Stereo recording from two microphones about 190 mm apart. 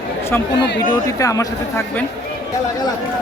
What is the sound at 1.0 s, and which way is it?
Speech, 15° left (ahead or behind).